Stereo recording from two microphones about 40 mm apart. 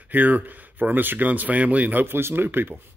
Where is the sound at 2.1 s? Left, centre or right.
Right.